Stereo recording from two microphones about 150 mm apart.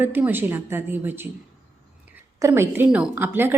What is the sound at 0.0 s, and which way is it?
A woman's voice, 15° right (ahead or behind).